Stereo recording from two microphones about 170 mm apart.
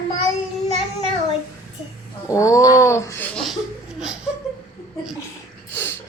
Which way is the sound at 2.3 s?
20° left (ahead or behind).